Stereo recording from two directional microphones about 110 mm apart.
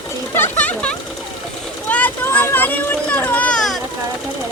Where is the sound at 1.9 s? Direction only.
15° left (ahead or behind).